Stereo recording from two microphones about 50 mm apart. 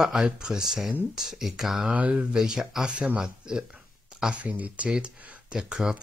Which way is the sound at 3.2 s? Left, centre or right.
Centre.